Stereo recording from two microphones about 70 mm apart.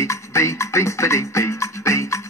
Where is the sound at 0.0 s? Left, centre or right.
Left.